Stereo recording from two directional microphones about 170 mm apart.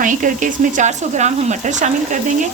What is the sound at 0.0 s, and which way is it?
Speech, 50° right (ahead or behind).